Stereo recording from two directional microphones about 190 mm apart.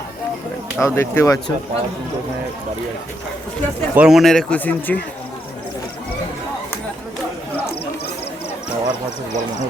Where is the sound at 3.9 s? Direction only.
5° right (ahead or behind).